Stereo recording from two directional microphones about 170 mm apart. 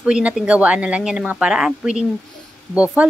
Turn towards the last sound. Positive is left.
turn(degrees=-5)  # may be behind; listen again after turning